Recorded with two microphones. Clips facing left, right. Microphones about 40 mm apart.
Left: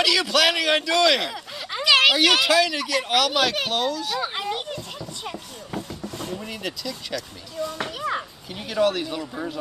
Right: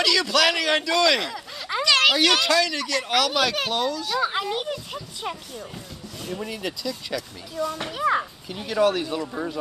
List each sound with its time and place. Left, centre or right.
0.0 s speech: centre
6.4 s speech: centre
7.2 s a child's voice: centre
8.6 s speech: centre